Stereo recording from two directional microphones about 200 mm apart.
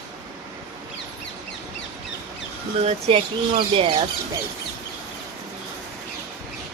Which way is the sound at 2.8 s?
30° right (ahead or behind).